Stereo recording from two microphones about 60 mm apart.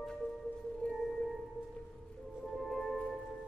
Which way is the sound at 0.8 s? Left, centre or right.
Centre.